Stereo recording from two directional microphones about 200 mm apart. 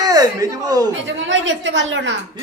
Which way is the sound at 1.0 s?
65° right (ahead or behind).